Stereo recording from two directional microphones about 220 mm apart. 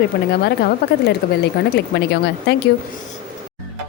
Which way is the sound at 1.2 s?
45° left (ahead or behind).